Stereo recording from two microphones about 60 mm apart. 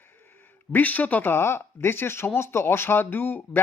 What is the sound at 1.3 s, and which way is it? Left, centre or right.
Speech, left.